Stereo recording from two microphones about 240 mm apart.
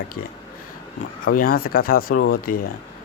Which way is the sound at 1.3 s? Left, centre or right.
Left.